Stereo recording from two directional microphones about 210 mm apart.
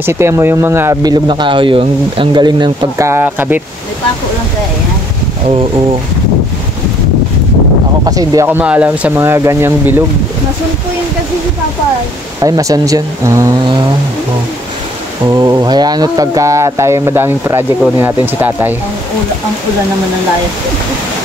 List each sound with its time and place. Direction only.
0.0 s speech: 10° right (ahead or behind)
8.0 s speech: 20° right (ahead or behind)
12.4 s speech: 15° right (ahead or behind)
15.2 s speech: 15° right (ahead or behind)